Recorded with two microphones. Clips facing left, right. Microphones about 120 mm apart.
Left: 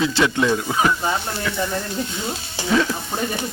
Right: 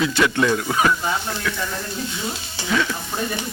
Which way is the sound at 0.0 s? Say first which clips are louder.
Even; 25° left (ahead or behind).